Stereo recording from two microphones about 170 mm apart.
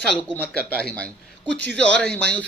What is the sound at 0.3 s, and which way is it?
A man's voice, 5° left (ahead or behind).